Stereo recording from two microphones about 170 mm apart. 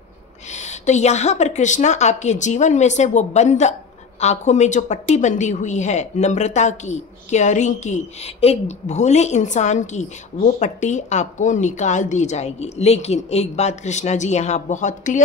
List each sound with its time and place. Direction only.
0.5 s a woman's voice: 45° left (ahead or behind)